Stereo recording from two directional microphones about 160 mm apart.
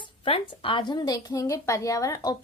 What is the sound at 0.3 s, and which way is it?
A woman's voice, 35° left (ahead or behind).